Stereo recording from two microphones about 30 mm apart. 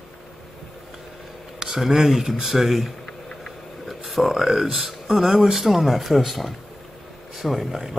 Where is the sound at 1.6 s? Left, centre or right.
Centre.